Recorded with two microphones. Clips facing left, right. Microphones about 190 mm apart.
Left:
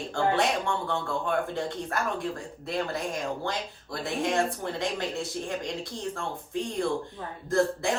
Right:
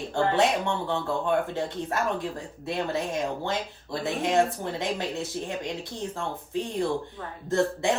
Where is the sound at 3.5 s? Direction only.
20° right (ahead or behind).